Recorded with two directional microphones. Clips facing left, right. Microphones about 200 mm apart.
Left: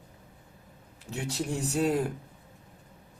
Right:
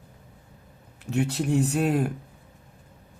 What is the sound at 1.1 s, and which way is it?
Speech, 60° right (ahead or behind).